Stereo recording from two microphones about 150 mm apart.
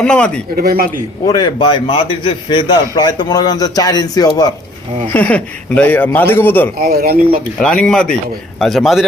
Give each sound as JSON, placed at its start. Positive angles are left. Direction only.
{"t": 0.0, "sound": "speech", "side_deg": 5}
{"t": 0.5, "sound": "speech", "side_deg": -90}
{"t": 1.3, "sound": "a man's voice", "side_deg": 30}
{"t": 5.1, "sound": "speech", "side_deg": 10}
{"t": 6.7, "sound": "speech", "side_deg": -80}
{"t": 7.6, "sound": "a man's voice", "side_deg": 5}